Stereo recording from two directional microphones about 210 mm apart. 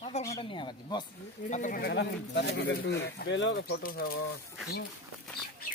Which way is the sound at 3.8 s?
45° left (ahead or behind).